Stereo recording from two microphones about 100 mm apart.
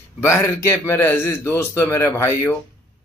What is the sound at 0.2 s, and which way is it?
A man's voice, 25° left (ahead or behind).